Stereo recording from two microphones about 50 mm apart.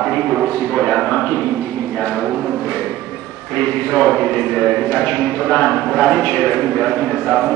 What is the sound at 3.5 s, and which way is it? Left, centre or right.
A man's voice, left.